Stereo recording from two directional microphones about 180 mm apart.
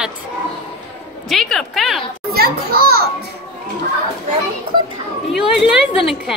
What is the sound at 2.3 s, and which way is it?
Children playing, 55° right (ahead or behind).